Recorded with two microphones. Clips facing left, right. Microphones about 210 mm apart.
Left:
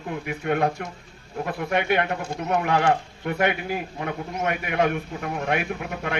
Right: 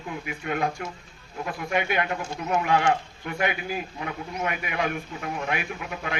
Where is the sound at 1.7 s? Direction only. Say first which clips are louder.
Left 3 dB; 65° left (ahead or behind).